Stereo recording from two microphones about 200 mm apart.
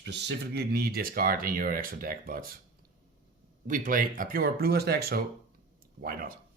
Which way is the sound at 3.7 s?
40° right (ahead or behind).